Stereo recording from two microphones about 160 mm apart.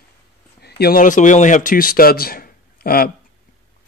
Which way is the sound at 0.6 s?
70° left (ahead or behind).